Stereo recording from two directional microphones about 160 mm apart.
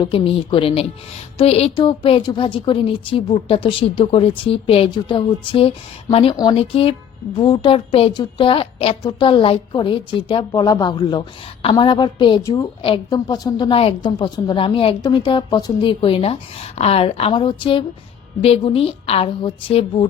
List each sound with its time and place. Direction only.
0.0 s a woman's voice: 30° left (ahead or behind)